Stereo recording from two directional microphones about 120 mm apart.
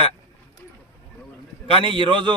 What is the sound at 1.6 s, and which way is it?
Speech, 45° right (ahead or behind).